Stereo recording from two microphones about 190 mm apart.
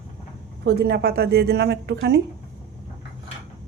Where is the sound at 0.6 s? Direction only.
60° right (ahead or behind).